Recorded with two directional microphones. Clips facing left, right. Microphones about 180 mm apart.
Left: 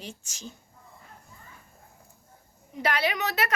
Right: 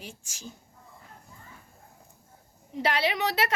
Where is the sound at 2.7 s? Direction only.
25° right (ahead or behind).